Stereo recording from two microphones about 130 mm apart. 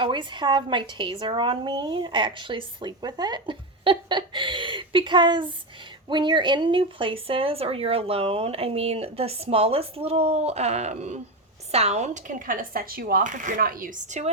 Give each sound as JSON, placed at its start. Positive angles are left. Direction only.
{"t": 0.0, "sound": "speech", "side_deg": -40}